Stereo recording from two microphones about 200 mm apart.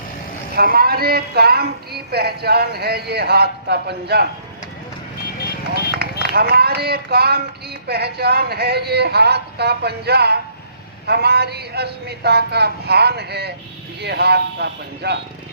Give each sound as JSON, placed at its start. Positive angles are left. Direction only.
{"t": 0.5, "sound": "speech", "side_deg": -50}
{"t": 6.0, "sound": "a man's voice", "side_deg": -50}